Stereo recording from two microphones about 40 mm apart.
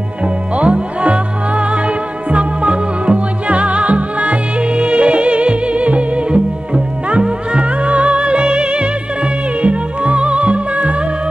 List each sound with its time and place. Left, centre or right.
0.2 s music: right